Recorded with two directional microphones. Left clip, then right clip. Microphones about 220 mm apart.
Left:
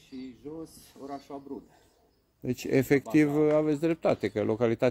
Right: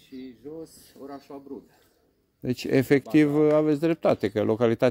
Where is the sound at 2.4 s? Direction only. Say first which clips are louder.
Right 3 dB; 30° right (ahead or behind).